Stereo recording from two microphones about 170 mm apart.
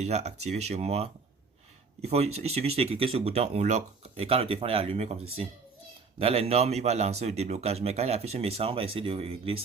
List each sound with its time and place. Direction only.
0.0 s speech: 40° right (ahead or behind)